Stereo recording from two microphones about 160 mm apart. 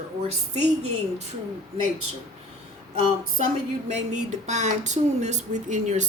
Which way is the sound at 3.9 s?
45° right (ahead or behind).